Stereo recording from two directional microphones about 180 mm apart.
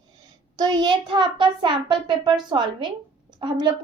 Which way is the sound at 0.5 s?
20° right (ahead or behind).